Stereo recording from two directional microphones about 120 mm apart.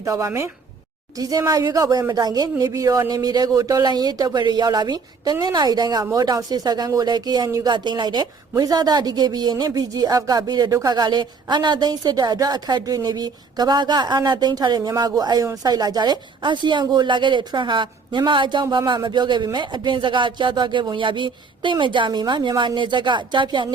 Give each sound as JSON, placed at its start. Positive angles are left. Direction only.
{"t": 0.0, "sound": "speech", "side_deg": -25}